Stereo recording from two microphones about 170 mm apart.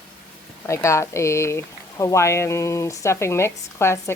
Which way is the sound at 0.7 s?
15° left (ahead or behind).